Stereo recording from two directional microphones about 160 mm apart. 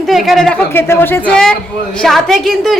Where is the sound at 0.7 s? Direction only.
15° left (ahead or behind).